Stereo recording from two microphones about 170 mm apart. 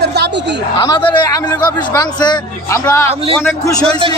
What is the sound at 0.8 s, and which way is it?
A man's voice, 30° left (ahead or behind).